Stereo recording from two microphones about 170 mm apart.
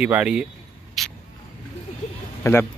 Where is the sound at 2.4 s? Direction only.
20° left (ahead or behind).